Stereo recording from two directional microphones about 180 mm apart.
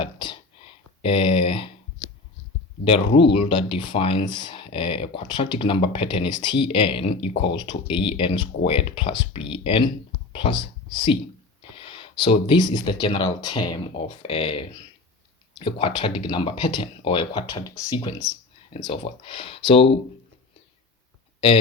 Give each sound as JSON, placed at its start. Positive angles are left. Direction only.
{"t": 0.0, "sound": "whispering", "side_deg": 25}
{"t": 1.0, "sound": "a sound", "side_deg": 30}
{"t": 2.8, "sound": "speech", "side_deg": 30}